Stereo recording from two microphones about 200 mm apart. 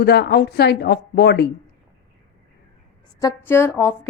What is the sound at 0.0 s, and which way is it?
Speech, 55° left (ahead or behind).